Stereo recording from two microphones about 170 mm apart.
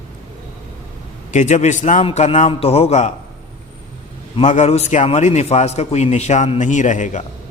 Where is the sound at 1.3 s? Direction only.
45° left (ahead or behind).